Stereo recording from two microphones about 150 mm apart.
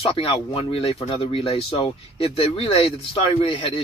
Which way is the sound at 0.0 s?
40° left (ahead or behind).